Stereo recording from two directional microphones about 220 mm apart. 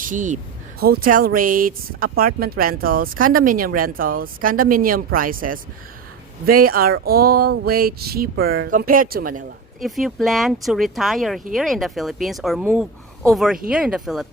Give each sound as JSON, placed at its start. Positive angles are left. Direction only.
{"t": 0.0, "sound": "speech", "side_deg": -35}
{"t": 9.8, "sound": "a woman's voice", "side_deg": 0}